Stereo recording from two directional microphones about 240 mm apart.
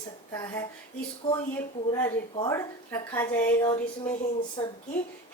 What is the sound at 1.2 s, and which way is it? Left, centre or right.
A woman's voice, left.